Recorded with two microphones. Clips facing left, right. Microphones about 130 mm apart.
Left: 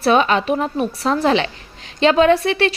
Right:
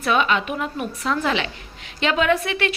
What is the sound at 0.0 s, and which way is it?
A woman's voice, 35° left (ahead or behind).